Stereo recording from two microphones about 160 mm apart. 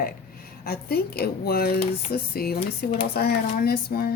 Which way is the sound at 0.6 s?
75° left (ahead or behind).